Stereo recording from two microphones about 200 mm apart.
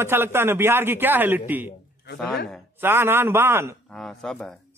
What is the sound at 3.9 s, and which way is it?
Speech, 5° left (ahead or behind).